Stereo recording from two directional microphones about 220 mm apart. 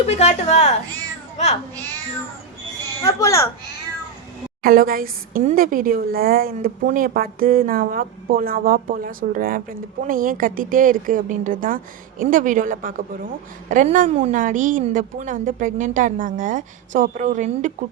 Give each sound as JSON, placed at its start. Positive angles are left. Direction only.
{"t": 0.0, "sound": "a woman's voice", "side_deg": 30}
{"t": 3.0, "sound": "a child's voice", "side_deg": 15}
{"t": 4.6, "sound": "a woman's voice", "side_deg": -40}